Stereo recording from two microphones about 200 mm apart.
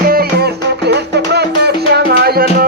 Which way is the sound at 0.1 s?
50° right (ahead or behind).